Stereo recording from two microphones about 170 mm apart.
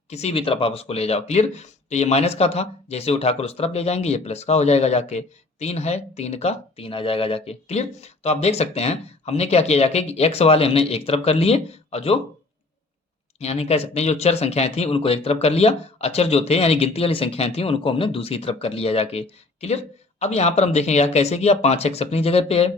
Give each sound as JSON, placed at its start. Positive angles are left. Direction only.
{"t": 0.1, "sound": "speech", "side_deg": 40}
{"t": 13.4, "sound": "speech", "side_deg": 40}